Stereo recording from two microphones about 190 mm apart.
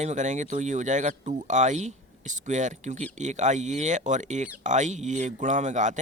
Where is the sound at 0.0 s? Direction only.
40° right (ahead or behind).